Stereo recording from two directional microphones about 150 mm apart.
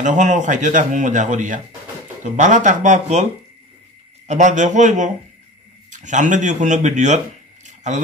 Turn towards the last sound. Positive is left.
turn(degrees=-55)  # may be behind; listen again after turning